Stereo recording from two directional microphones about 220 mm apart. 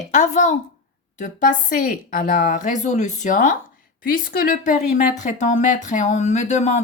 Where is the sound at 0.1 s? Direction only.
35° left (ahead or behind).